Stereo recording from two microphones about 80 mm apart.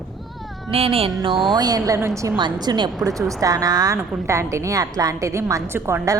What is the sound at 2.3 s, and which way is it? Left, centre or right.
Speech, right.